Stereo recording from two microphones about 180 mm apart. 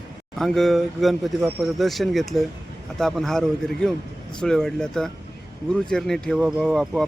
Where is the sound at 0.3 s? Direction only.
Centre (ahead or behind).